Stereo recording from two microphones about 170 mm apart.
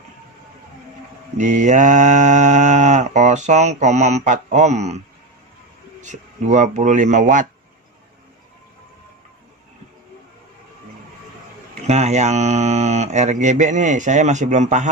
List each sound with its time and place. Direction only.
1.4 s mantra: 45° right (ahead or behind)
6.0 s speech: 45° right (ahead or behind)
11.9 s speech: 40° right (ahead or behind)